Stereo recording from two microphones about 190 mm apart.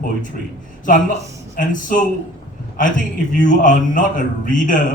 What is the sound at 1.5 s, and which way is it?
Speech, 45° left (ahead or behind).